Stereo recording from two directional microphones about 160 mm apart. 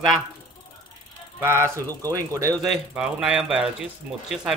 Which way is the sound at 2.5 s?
Centre (ahead or behind).